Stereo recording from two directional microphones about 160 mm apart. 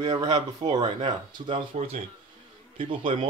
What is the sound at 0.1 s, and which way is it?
Speech, 25° right (ahead or behind).